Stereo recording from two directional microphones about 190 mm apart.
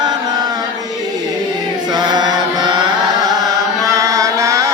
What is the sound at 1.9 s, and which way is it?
Chant, 20° right (ahead or behind).